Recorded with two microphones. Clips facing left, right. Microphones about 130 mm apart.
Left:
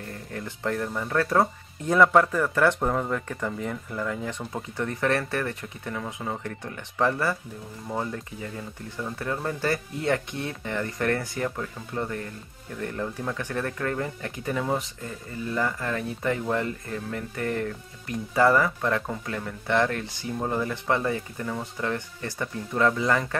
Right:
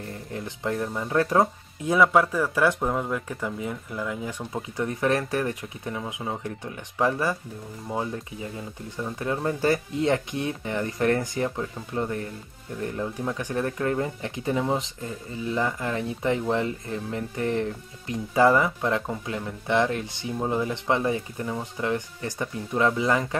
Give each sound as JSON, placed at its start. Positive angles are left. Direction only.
{"t": 0.3, "sound": "speech", "side_deg": -20}
{"t": 2.0, "sound": "speech", "side_deg": -5}
{"t": 9.0, "sound": "speech", "side_deg": -15}